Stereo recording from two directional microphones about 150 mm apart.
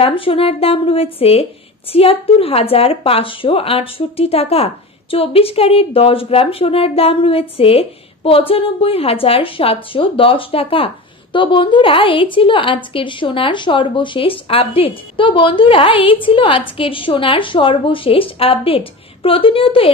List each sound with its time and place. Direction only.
0.0 s a woman's voice: 40° left (ahead or behind)